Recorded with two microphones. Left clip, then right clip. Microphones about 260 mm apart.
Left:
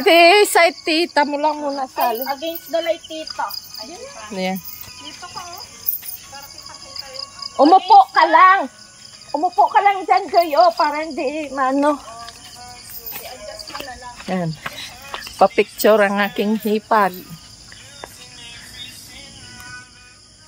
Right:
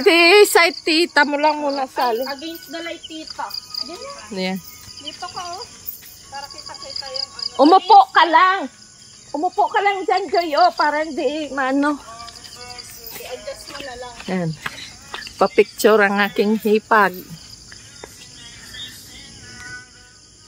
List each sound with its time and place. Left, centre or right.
0.0 s speech: centre
6.7 s music: right
7.5 s speech: centre
14.2 s speech: centre